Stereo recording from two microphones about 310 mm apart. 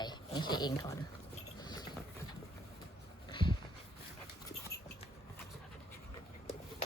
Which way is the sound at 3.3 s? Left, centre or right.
Centre.